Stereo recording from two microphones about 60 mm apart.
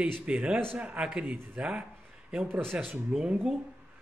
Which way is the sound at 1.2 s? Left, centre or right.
Right.